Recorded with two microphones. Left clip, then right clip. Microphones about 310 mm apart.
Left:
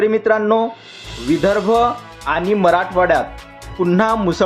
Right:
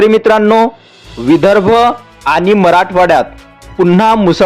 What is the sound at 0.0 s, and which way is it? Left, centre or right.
A man's voice, right.